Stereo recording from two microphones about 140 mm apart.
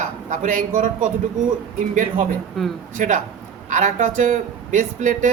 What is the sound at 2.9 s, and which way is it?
Speech, 65° right (ahead or behind).